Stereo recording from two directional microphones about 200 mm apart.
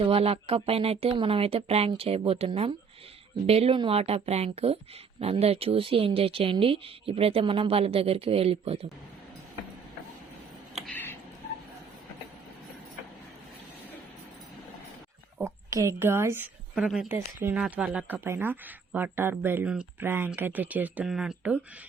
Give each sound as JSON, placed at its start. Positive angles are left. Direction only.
{"t": 0.0, "sound": "speech", "side_deg": -30}
{"t": 10.8, "sound": "a sound", "side_deg": 5}
{"t": 15.4, "sound": "a woman's voice", "side_deg": -15}